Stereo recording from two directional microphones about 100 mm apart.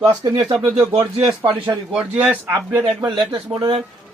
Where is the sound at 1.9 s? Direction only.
15° right (ahead or behind).